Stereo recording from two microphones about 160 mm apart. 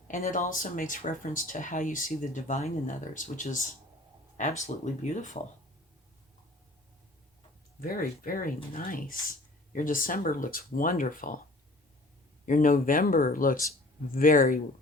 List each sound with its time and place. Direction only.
0.1 s speech: 55° left (ahead or behind)
7.8 s speech: 65° left (ahead or behind)
12.5 s speech: 60° left (ahead or behind)